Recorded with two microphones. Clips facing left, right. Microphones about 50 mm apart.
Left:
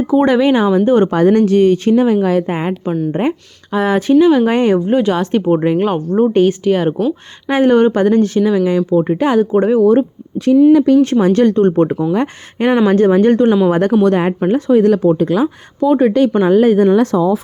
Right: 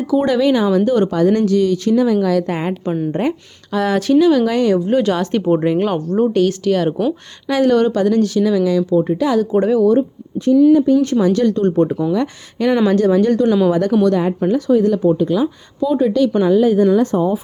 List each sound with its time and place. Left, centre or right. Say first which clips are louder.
0.1 s speech: left 2 dB; left
4.9 s speech: left 2 dB; centre; by 10.0 s left
10.0 s a sound: left 2 dB; left
10.7 s speech: left 3 dB; left
11.0 s speech: left 3 dB; left